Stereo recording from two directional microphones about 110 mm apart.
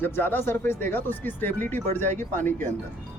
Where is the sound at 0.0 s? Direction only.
20° left (ahead or behind).